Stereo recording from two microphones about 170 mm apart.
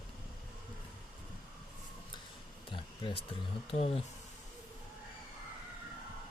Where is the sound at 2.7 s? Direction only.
30° left (ahead or behind).